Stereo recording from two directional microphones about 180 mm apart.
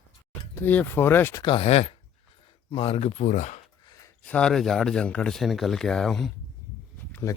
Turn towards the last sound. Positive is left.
turn(degrees=10)  # may be behind; listen again after turning